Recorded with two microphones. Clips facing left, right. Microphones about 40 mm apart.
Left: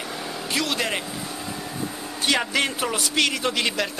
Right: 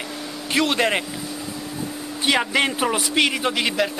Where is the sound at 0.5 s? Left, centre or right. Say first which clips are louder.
Right 6 dB; right.